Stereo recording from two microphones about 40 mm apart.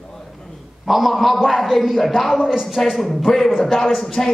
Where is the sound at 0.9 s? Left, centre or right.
Centre.